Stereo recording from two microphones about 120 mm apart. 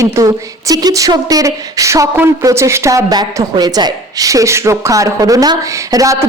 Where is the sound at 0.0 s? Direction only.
25° right (ahead or behind).